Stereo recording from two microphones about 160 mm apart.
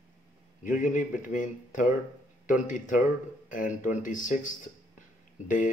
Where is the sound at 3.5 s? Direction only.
55° left (ahead or behind).